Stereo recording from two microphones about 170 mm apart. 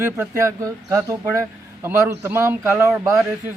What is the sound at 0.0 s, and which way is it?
A man's voice, 15° right (ahead or behind).